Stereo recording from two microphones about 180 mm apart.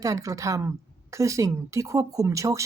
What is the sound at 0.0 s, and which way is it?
Speech, 20° right (ahead or behind).